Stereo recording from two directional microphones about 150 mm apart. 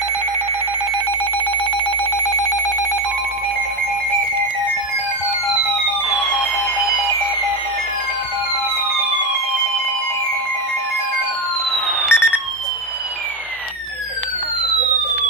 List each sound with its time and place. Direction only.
2.0 s alarm clock: 20° left (ahead or behind)
6.1 s music: 5° left (ahead or behind)
6.8 s alarm: 25° left (ahead or behind)
11.7 s fireworks: 10° left (ahead or behind)
12.1 s a sound: 15° left (ahead or behind)